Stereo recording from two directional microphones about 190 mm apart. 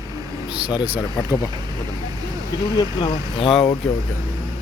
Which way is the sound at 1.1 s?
15° left (ahead or behind).